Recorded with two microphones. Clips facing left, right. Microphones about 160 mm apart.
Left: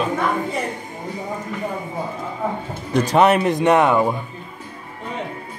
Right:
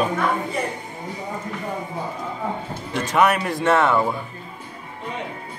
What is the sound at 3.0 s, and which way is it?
Speech, 25° left (ahead or behind).